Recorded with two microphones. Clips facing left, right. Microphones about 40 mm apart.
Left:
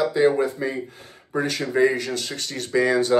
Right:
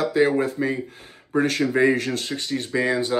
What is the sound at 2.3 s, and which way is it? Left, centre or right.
Speech, centre.